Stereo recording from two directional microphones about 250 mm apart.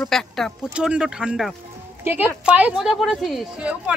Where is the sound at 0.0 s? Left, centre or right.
Centre.